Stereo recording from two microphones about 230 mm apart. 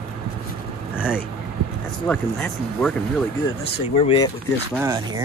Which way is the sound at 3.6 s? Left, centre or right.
Left.